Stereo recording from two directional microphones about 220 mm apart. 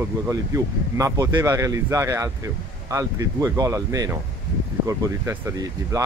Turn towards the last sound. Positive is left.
turn(degrees=-15)  # may be behind; listen again after turning